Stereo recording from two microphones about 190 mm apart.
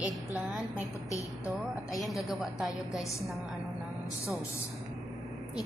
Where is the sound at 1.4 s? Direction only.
Centre (ahead or behind).